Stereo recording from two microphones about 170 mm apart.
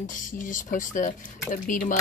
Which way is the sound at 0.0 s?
50° left (ahead or behind).